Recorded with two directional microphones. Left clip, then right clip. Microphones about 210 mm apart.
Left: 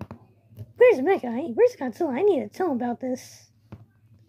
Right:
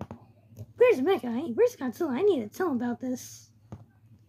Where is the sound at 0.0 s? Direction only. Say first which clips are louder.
Left 1 dB; centre (ahead or behind).